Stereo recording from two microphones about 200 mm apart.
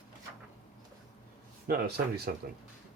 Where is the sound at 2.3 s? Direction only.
50° right (ahead or behind).